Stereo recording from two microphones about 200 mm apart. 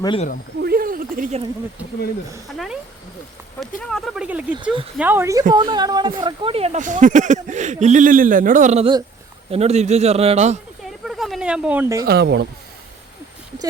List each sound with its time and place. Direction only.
0.0 s speech: 25° left (ahead or behind)
0.6 s a sound: 45° right (ahead or behind)
2.5 s speech: centre (ahead or behind)
3.8 s speech: centre (ahead or behind); by 10.6 s 35° right (ahead or behind)
11.0 s a sound: centre (ahead or behind)
12.0 s speech: 55° right (ahead or behind)